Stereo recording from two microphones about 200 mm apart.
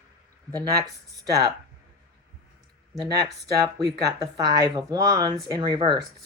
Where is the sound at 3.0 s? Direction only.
20° right (ahead or behind).